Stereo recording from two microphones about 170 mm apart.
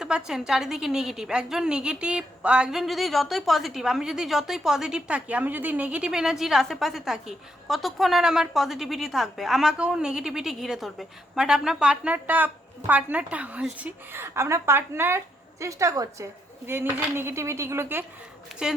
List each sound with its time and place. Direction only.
0.3 s a woman's voice: 5° right (ahead or behind)